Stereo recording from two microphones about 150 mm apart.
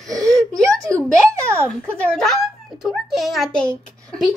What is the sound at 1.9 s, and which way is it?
A child's voice, 5° left (ahead or behind).